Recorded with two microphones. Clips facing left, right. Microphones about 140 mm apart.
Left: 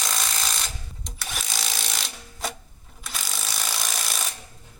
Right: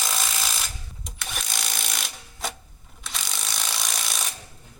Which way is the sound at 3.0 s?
Centre (ahead or behind).